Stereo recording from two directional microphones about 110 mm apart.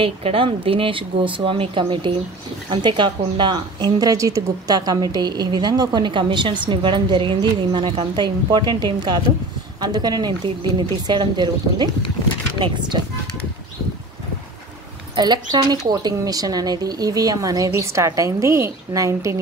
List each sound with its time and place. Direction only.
0.0 s a woman's voice: 55° right (ahead or behind)
15.1 s speech: 40° right (ahead or behind)